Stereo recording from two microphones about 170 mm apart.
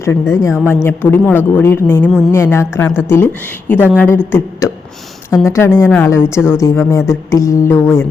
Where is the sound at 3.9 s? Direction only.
10° left (ahead or behind).